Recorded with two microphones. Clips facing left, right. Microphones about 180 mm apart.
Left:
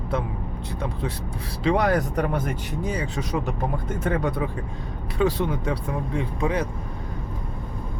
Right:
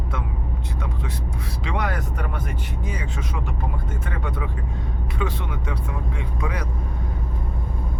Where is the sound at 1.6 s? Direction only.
35° left (ahead or behind).